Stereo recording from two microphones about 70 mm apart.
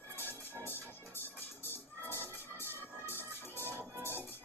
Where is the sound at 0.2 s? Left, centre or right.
Left.